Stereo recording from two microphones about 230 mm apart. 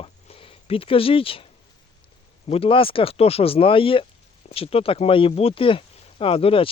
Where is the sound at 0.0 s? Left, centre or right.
Left.